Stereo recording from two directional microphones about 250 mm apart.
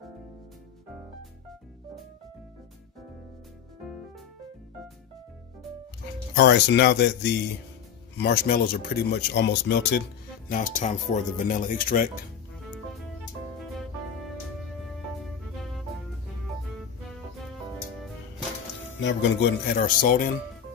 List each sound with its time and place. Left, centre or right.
6.3 s speech: left
10.5 s speech: left
13.7 s music: centre
18.9 s speech: left